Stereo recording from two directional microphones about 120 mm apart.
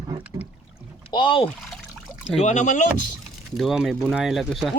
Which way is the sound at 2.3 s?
75° left (ahead or behind).